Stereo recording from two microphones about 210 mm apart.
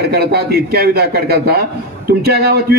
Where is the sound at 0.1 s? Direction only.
50° right (ahead or behind).